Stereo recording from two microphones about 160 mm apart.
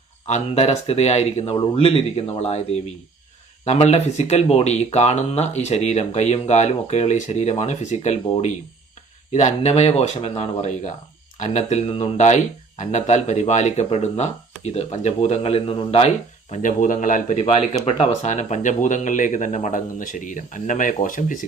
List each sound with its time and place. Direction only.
0.3 s speech: 45° left (ahead or behind)
9.3 s speech: 45° left (ahead or behind)